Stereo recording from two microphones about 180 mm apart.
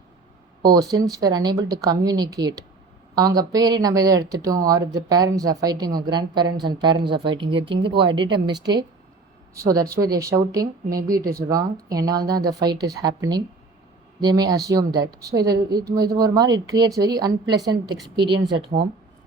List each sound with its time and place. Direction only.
0.7 s speech: 20° right (ahead or behind)
18.5 s speech: 65° right (ahead or behind)